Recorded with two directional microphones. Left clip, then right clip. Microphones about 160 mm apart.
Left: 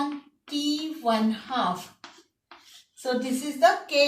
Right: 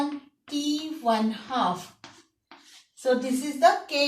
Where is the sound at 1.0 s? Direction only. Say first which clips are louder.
Even; 10° left (ahead or behind).